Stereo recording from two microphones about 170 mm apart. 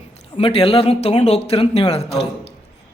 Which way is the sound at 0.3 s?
35° left (ahead or behind).